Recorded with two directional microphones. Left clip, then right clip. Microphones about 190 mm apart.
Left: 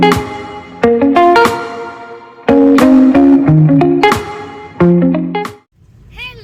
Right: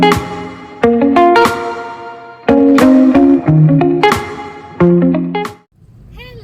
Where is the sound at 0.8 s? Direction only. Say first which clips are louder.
Left 1 dB; 5° right (ahead or behind).